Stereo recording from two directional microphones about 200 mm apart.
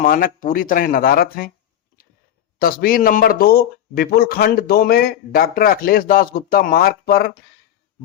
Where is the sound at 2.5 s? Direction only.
45° left (ahead or behind).